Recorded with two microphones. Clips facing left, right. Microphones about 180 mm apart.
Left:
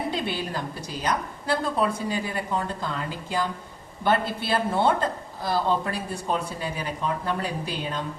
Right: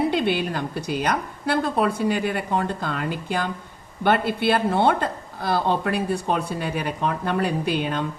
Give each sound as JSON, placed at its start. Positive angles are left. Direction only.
{"t": 0.1, "sound": "speech", "side_deg": -65}